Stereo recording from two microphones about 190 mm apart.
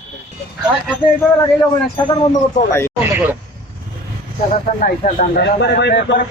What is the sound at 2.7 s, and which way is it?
Speech, 15° left (ahead or behind).